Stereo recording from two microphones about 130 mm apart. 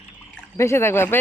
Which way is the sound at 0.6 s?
20° left (ahead or behind).